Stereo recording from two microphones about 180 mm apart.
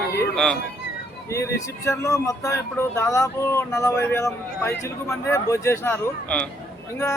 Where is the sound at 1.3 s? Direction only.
15° left (ahead or behind).